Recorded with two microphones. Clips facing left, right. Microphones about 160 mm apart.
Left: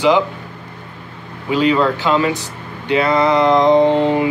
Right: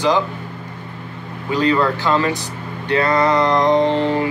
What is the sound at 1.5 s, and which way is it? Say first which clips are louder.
Speech: left 2 dB; 15° left (ahead or behind).